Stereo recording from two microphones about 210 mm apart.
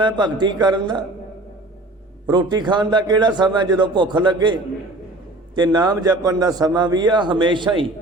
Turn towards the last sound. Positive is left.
turn(degrees=-20)  # may be behind; listen again after turning